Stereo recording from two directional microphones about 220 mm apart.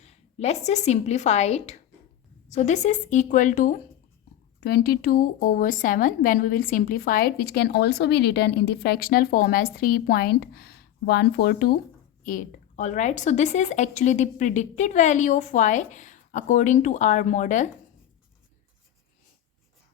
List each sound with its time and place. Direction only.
0.0 s a woman's voice: 30° left (ahead or behind)